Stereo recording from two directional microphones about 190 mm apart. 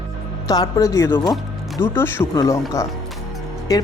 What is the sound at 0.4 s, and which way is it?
Speech, 20° left (ahead or behind).